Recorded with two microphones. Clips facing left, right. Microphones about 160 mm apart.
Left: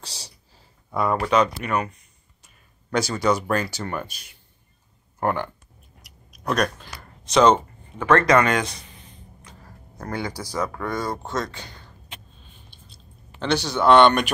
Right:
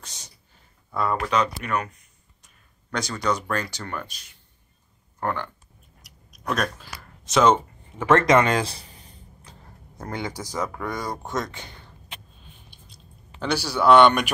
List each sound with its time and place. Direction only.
0.0 s speech: 35° left (ahead or behind)
1.3 s speech: 5° left (ahead or behind)
5.2 s speech: 10° left (ahead or behind)
6.0 s a sound: centre (ahead or behind)
8.0 s speech: 25° right (ahead or behind)
9.4 s a sound: 30° right (ahead or behind)
9.9 s speech: 20° right (ahead or behind)
13.4 s speech: 10° right (ahead or behind)